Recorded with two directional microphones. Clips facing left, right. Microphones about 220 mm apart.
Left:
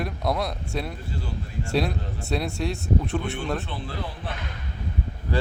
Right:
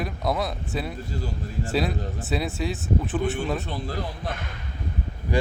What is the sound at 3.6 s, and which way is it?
Speech, 40° right (ahead or behind).